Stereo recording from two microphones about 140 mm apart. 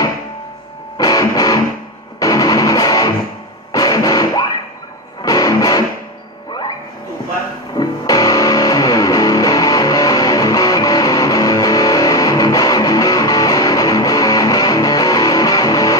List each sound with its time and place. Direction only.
0.9 s music: 25° left (ahead or behind)
7.7 s music: 25° left (ahead or behind)